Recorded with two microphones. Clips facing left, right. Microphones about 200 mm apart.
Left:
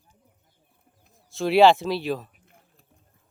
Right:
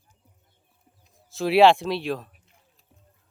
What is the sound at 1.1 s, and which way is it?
Speech, centre (ahead or behind).